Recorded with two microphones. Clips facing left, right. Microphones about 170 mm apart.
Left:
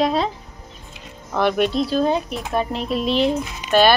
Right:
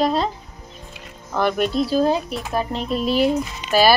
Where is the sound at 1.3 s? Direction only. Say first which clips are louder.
Left 1 dB; centre (ahead or behind).